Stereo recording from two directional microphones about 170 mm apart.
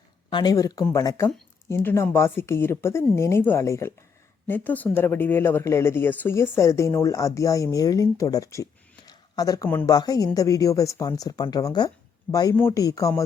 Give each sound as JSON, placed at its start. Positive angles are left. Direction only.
{"t": 0.3, "sound": "a woman's voice", "side_deg": 25}
{"t": 9.0, "sound": "a sound", "side_deg": 20}
{"t": 9.8, "sound": "speech", "side_deg": 20}